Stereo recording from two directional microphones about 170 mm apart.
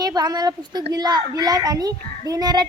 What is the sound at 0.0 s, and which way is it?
A child's voice, 25° right (ahead or behind).